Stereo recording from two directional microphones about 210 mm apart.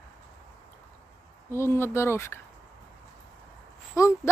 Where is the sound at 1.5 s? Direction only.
10° left (ahead or behind).